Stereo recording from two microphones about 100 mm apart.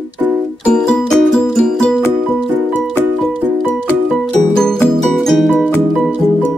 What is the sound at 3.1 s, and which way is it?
Music, 5° left (ahead or behind).